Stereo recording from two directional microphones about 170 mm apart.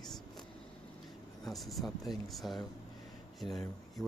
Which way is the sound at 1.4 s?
Centre (ahead or behind).